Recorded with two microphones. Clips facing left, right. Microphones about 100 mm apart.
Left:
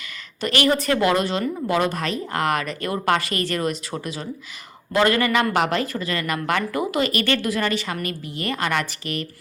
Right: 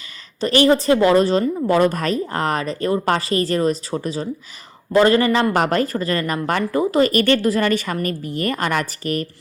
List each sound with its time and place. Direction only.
0.3 s a woman's voice: 30° right (ahead or behind)